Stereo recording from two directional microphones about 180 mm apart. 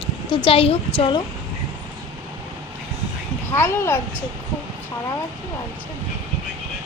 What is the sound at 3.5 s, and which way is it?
Speech, 15° left (ahead or behind).